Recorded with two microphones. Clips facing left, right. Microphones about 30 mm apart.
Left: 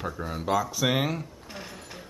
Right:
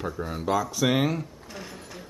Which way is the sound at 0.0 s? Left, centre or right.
Centre.